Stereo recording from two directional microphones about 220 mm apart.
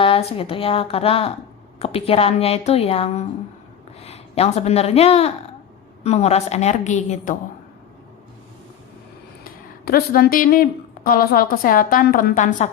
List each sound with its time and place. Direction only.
0.0 s a woman's voice: 25° left (ahead or behind)
9.4 s a woman's voice: 40° left (ahead or behind)